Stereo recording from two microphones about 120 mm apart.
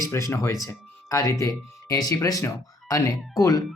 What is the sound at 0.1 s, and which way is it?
Speech, 25° left (ahead or behind).